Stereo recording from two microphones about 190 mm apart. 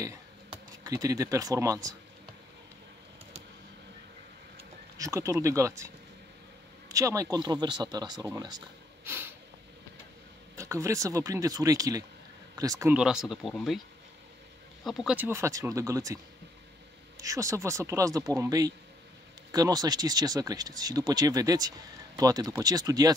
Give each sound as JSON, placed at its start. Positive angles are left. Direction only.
{"t": 0.5, "sound": "speech", "side_deg": -15}
{"t": 4.9, "sound": "speech", "side_deg": -15}
{"t": 6.9, "sound": "speech", "side_deg": -15}
{"t": 10.5, "sound": "speech", "side_deg": -15}
{"t": 12.9, "sound": "speech", "side_deg": -5}
{"t": 14.9, "sound": "speech", "side_deg": -5}
{"t": 17.2, "sound": "speech", "side_deg": -15}